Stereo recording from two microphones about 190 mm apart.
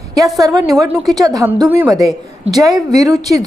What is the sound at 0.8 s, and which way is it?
Speech, 5° right (ahead or behind).